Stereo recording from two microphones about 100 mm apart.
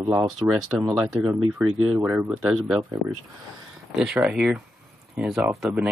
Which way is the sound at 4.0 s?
5° right (ahead or behind).